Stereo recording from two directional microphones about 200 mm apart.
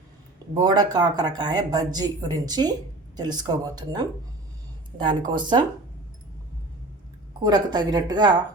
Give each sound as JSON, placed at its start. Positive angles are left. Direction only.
{"t": 0.5, "sound": "speech", "side_deg": -20}
{"t": 5.3, "sound": "speech", "side_deg": -20}
{"t": 7.4, "sound": "speech", "side_deg": -20}